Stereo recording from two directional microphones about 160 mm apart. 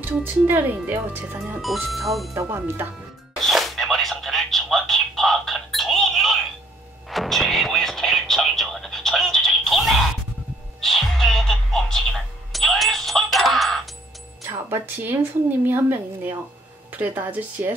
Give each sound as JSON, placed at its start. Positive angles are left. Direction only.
{"t": 0.0, "sound": "speech", "side_deg": -10}
{"t": 1.9, "sound": "speech", "side_deg": 0}
{"t": 2.3, "sound": "speech", "side_deg": -15}
{"t": 3.3, "sound": "telephone", "side_deg": 0}
{"t": 7.1, "sound": "music", "side_deg": 0}
{"t": 14.4, "sound": "music", "side_deg": -15}
{"t": 15.6, "sound": "speech", "side_deg": -10}